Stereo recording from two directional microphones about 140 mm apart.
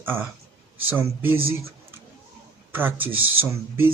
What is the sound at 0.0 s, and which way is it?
Speech, 15° right (ahead or behind).